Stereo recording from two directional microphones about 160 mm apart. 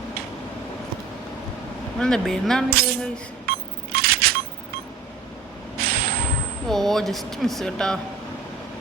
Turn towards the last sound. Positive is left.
turn(degrees=5)  # may be behind; listen again after turning